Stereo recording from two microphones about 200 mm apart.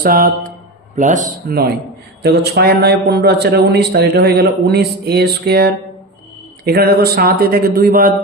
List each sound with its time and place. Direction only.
0.0 s a man's voice: 45° right (ahead or behind)